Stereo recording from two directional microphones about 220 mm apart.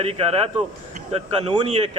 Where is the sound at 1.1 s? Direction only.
25° right (ahead or behind).